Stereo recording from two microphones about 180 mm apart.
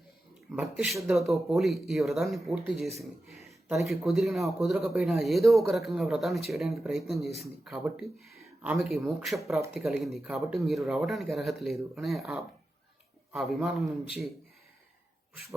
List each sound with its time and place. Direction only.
0.5 s a man's voice: 5° right (ahead or behind)
3.8 s a man's voice: centre (ahead or behind)